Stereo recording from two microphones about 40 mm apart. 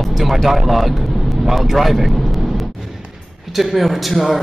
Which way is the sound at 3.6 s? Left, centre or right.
Centre.